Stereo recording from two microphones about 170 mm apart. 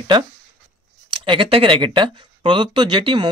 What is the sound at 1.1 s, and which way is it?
Speech, 30° right (ahead or behind).